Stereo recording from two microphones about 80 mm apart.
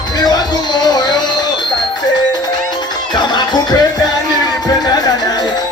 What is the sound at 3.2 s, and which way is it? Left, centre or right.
Music, left.